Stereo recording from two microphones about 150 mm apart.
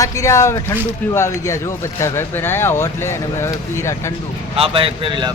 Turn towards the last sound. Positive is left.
turn(degrees=-35)  # may be behind; listen again after turning